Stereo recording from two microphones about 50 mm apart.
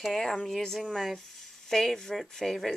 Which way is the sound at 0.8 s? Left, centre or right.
Centre.